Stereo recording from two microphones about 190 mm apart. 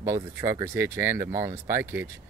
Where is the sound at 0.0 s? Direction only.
15° right (ahead or behind).